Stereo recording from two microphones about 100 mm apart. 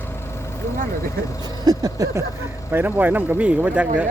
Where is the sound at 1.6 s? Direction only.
40° right (ahead or behind).